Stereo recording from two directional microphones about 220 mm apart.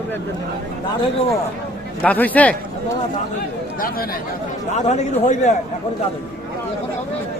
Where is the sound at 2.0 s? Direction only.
5° left (ahead or behind).